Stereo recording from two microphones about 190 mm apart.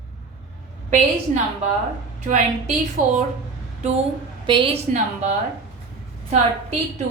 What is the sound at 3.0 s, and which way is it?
Speech, 45° right (ahead or behind).